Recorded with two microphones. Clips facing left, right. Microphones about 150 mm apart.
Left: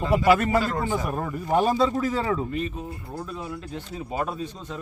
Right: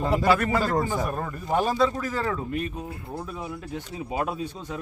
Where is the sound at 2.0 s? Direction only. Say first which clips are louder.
Left 3 dB; 20° left (ahead or behind).